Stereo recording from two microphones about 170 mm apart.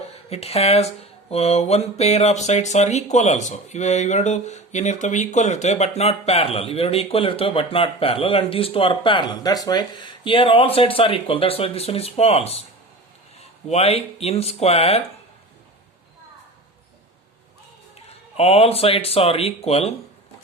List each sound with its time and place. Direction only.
0.3 s speech: 35° left (ahead or behind)
13.7 s speech: 40° left (ahead or behind)
17.9 s speech: 35° left (ahead or behind)